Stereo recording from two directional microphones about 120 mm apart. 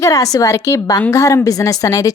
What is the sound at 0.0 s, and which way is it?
A woman's voice, 30° left (ahead or behind).